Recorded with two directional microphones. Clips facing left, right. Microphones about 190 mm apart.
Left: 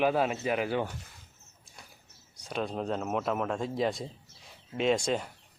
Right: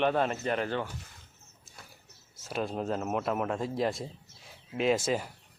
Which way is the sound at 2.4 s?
5° right (ahead or behind).